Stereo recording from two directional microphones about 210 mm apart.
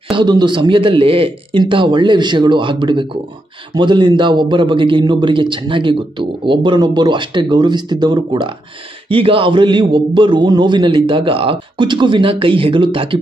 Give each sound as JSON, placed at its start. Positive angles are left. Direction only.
{"t": 0.1, "sound": "a man's voice", "side_deg": -20}